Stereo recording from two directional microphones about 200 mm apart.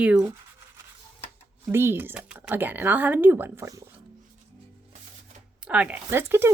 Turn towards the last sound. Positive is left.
turn(degrees=-10)  # may be behind; listen again after turning